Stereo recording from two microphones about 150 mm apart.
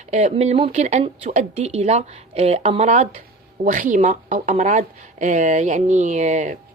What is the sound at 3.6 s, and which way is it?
Speech, 60° right (ahead or behind).